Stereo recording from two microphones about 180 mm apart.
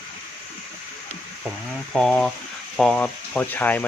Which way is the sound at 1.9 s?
5° left (ahead or behind).